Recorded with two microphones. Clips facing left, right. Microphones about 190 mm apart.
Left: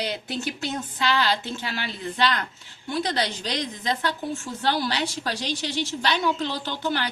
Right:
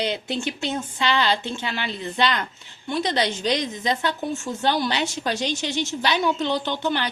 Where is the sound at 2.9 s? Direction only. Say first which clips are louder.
Right 3 dB; 20° right (ahead or behind).